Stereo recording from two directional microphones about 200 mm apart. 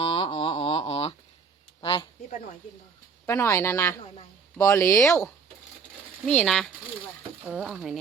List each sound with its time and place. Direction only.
0.0 s a sound: 30° left (ahead or behind)
3.2 s speech: 15° left (ahead or behind)
6.2 s speech: 5° left (ahead or behind)